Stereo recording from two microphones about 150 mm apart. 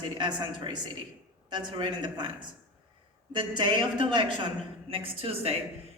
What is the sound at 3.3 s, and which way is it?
A woman's voice, 30° right (ahead or behind).